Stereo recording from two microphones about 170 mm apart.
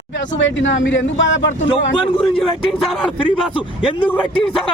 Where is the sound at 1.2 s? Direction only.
90° left.